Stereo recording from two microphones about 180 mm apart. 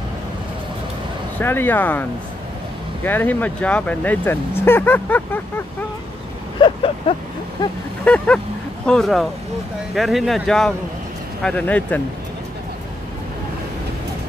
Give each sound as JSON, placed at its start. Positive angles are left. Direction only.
{"t": 1.4, "sound": "speech", "side_deg": 10}
{"t": 6.6, "sound": "vehicle", "side_deg": 30}
{"t": 7.6, "sound": "a sound", "side_deg": 20}
{"t": 8.0, "sound": "speech", "side_deg": 5}